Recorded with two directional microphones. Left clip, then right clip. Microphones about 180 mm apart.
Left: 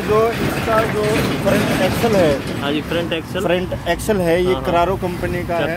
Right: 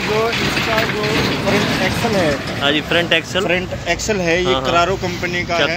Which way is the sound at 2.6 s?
10° right (ahead or behind).